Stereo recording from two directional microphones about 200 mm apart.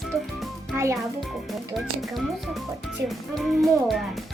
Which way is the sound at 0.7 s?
15° right (ahead or behind).